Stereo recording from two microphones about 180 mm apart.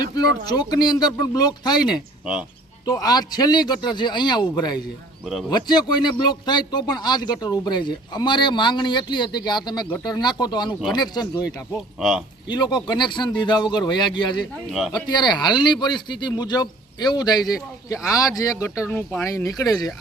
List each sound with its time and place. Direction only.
0.4 s speech: 20° left (ahead or behind)
11.9 s speech: centre (ahead or behind)
12.5 s speech: 25° left (ahead or behind)